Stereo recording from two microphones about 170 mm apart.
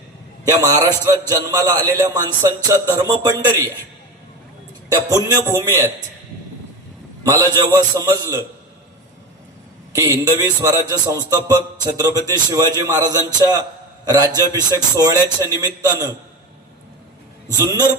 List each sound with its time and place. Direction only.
0.4 s a man's voice: 20° right (ahead or behind)
4.9 s a man's voice: 20° right (ahead or behind)
7.3 s a man's voice: 20° right (ahead or behind)
9.9 s a man's voice: 20° right (ahead or behind)
17.6 s a man's voice: 20° right (ahead or behind)